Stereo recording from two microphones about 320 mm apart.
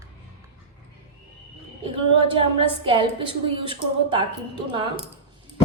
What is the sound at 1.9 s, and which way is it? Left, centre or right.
A woman's voice, centre.